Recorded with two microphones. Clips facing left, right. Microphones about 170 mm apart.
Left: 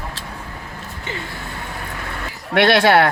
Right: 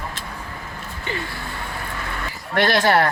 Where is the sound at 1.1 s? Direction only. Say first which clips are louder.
Right 2 dB; 20° left (ahead or behind).